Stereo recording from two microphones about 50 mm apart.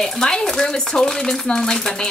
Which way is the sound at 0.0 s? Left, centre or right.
Centre.